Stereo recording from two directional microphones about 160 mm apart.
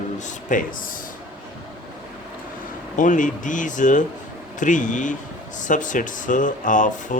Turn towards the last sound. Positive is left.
turn(degrees=55)  # may be behind; listen again after turning